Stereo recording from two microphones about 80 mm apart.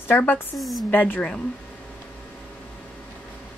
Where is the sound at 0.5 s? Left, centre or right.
Centre.